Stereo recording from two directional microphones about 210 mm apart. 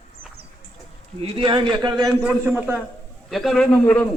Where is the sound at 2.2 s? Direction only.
5° right (ahead or behind).